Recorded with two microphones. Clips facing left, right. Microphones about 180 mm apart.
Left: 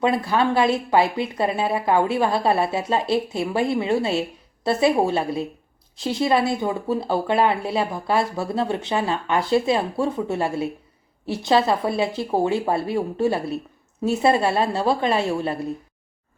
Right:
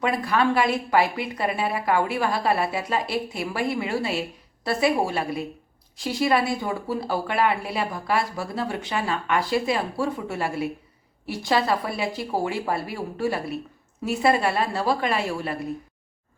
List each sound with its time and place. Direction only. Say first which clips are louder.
0.0 s speech: left 2 dB; 25° left (ahead or behind)